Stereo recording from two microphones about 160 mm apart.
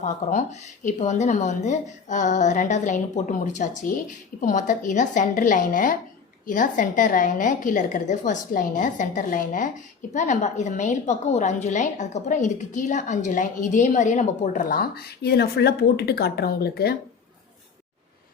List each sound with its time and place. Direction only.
0.0 s a woman's voice: 50° left (ahead or behind); by 16.9 s 80° left